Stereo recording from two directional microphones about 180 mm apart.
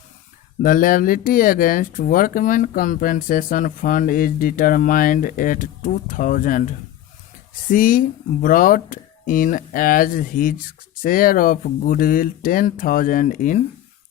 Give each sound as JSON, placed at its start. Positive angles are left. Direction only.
{"t": 0.6, "sound": "speech", "side_deg": 50}